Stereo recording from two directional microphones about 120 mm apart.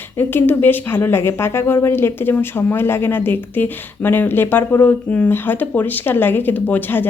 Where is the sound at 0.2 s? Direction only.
15° left (ahead or behind).